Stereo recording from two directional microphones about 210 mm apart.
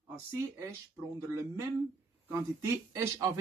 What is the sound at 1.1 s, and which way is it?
Speech, 15° right (ahead or behind).